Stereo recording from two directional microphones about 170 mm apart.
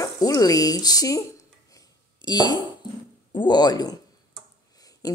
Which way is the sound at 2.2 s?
25° left (ahead or behind).